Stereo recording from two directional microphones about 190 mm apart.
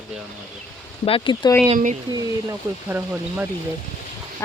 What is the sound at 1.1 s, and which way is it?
Speech, 25° left (ahead or behind).